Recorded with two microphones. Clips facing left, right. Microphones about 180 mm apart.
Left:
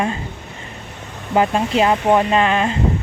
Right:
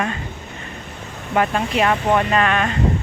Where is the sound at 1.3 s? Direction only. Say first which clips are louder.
Left 3 dB; 25° left (ahead or behind).